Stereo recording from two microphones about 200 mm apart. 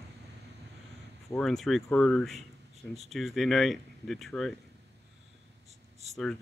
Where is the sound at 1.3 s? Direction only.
Centre (ahead or behind).